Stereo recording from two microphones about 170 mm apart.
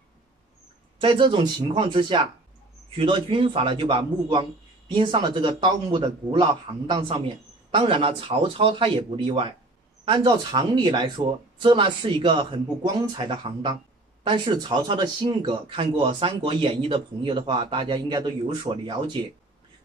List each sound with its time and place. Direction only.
1.0 s speech: 30° right (ahead or behind)